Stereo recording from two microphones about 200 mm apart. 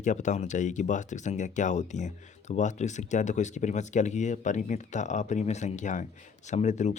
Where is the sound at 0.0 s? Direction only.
40° left (ahead or behind).